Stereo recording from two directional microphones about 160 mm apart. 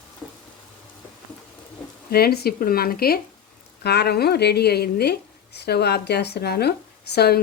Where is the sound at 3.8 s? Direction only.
90° left.